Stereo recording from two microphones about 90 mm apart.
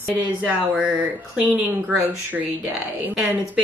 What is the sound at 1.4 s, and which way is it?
Speech, 15° right (ahead or behind).